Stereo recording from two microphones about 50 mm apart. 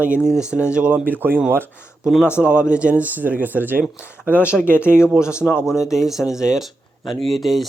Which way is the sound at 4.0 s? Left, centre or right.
Left.